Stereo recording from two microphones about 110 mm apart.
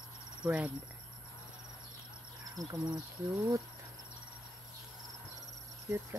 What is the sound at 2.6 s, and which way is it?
Speech, 40° right (ahead or behind).